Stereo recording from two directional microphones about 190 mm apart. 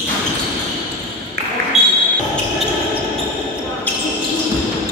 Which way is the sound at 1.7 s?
35° right (ahead or behind).